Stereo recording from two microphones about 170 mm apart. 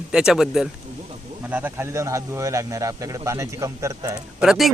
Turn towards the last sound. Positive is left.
turn(degrees=0)  # may be behind; listen again after turning